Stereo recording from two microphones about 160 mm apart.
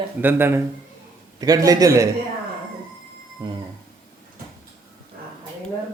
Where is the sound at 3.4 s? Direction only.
30° right (ahead or behind).